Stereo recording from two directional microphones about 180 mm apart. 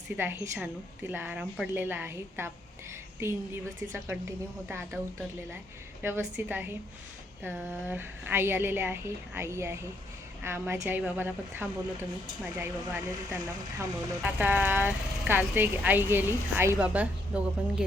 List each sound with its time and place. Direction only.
0.2 s speech: 10° right (ahead or behind)
6.0 s speech: 10° right (ahead or behind)
14.2 s speech: 10° right (ahead or behind)